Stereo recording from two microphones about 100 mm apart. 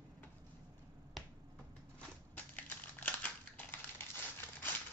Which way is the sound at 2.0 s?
15° left (ahead or behind).